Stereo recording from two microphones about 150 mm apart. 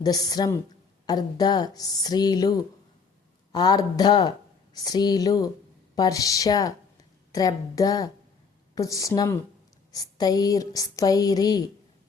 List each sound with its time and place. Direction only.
0.0 s speech: 25° left (ahead or behind)